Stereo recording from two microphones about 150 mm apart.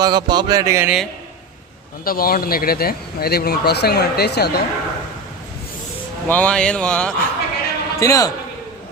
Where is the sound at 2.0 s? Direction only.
80° left.